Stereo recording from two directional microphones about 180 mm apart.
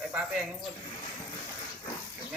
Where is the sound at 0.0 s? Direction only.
5° right (ahead or behind).